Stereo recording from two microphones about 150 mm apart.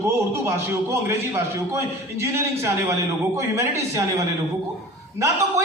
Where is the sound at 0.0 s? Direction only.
15° right (ahead or behind).